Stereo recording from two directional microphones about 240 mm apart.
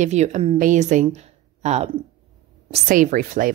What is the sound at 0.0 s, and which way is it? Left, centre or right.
Speech, right.